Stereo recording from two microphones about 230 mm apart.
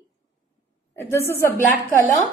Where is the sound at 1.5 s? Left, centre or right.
Left.